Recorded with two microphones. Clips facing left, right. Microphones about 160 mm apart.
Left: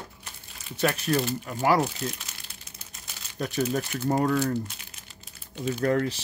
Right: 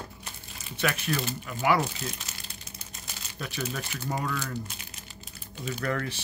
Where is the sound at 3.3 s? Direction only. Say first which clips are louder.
Left 7 dB; 40° left (ahead or behind).